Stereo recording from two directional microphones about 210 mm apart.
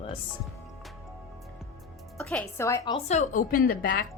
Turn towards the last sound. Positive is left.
turn(degrees=45)  # may be behind; listen again after turning